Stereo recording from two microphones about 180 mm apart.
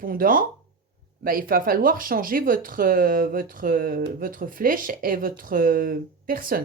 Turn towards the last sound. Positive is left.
turn(degrees=-50)  # may be behind; listen again after turning